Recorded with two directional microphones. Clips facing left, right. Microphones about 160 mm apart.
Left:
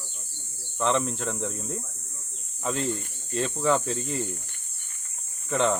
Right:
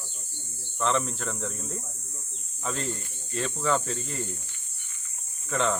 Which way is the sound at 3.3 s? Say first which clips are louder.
Left 3 dB; 15° left (ahead or behind).